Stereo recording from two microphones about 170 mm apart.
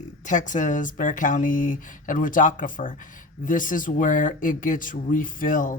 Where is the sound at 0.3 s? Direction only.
45° left (ahead or behind).